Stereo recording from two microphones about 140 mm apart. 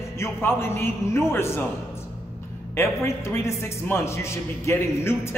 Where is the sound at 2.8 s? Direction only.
20° left (ahead or behind).